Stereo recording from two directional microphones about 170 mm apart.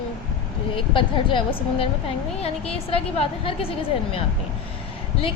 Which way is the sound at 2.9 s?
35° left (ahead or behind).